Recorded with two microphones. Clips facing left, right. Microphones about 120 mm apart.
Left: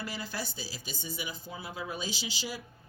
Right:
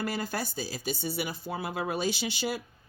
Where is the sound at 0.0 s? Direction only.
50° right (ahead or behind).